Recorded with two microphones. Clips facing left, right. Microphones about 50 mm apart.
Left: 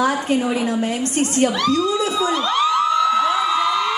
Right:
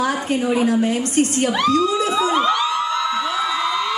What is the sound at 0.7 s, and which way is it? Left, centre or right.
Speech, left.